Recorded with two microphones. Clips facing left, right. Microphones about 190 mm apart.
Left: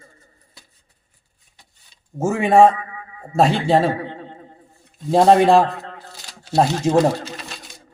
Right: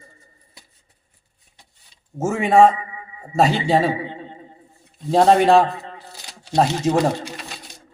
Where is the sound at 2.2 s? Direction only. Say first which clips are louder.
Left 1 dB; 10° left (ahead or behind).